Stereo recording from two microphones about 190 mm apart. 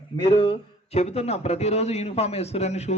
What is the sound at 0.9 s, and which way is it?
A man's voice, 35° left (ahead or behind).